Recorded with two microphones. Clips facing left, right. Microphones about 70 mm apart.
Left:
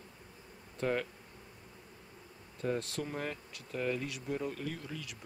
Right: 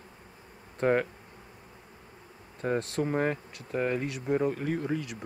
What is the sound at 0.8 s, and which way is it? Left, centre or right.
Speech, right.